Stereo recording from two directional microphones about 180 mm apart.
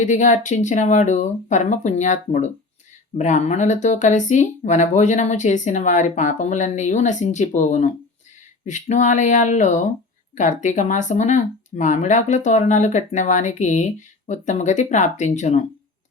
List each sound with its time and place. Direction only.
0.0 s speech: 45° left (ahead or behind)